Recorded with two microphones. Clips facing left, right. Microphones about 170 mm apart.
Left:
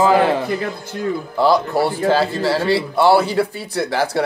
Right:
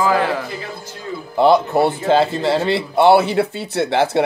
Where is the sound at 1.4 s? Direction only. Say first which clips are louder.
Right 3 dB; 20° right (ahead or behind).